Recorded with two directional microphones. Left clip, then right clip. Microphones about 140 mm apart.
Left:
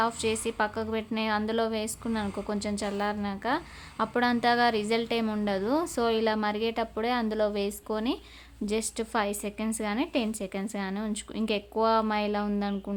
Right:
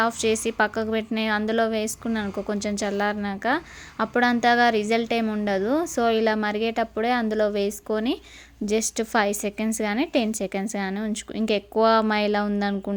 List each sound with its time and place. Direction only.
0.0 s a woman's voice: 25° right (ahead or behind)